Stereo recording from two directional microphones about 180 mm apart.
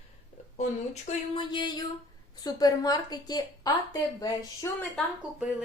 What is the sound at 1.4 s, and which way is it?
A woman's voice, 25° left (ahead or behind).